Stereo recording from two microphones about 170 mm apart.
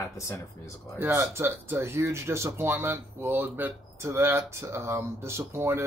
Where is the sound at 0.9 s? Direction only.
15° right (ahead or behind).